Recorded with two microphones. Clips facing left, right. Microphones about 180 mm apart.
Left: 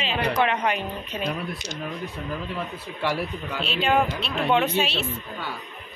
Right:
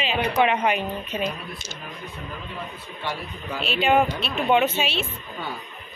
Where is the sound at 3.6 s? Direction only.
10° right (ahead or behind).